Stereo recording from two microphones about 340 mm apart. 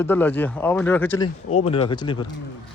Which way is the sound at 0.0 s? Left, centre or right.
Centre.